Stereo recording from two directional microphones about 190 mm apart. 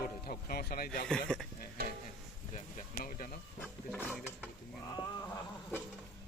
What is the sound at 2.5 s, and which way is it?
Speech, 45° left (ahead or behind).